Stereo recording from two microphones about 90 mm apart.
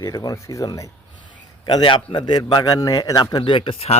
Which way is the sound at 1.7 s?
60° left (ahead or behind).